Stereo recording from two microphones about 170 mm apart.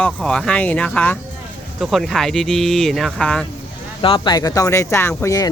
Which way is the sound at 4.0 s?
30° left (ahead or behind).